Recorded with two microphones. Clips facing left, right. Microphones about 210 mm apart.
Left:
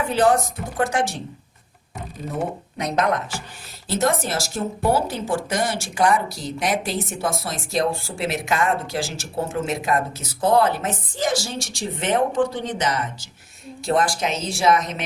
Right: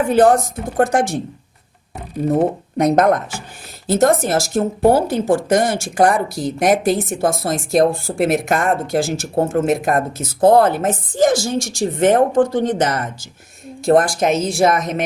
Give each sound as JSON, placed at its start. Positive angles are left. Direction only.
{"t": 0.1, "sound": "speech", "side_deg": -50}
{"t": 2.3, "sound": "speech", "side_deg": -50}